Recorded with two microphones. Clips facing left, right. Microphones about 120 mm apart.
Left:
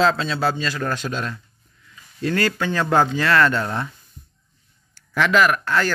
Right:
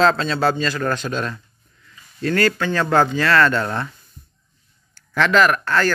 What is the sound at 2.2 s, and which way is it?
Speech, 15° left (ahead or behind).